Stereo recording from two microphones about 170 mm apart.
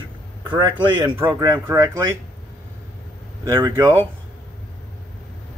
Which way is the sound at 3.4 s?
15° right (ahead or behind).